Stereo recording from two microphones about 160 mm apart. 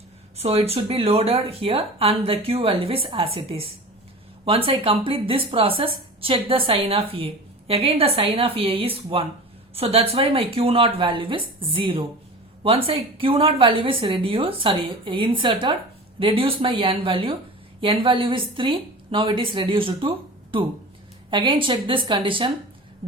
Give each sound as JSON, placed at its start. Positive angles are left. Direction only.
{"t": 0.3, "sound": "a woman's voice", "side_deg": -40}